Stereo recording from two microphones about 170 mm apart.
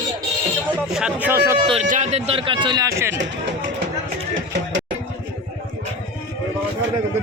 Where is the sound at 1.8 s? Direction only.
45° right (ahead or behind); by 3.2 s 15° right (ahead or behind).